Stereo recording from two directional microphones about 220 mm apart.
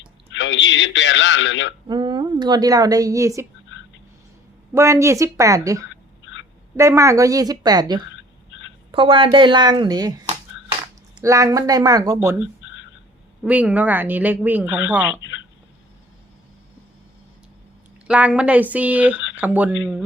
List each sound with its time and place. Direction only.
0.3 s a man's voice: 55° left (ahead or behind)
1.9 s a woman's voice: 20° right (ahead or behind)
3.7 s a sound: 60° left (ahead or behind)
4.7 s a woman's voice: 15° right (ahead or behind)
15.2 s speech: 60° left (ahead or behind)
18.1 s a woman's voice: 5° right (ahead or behind)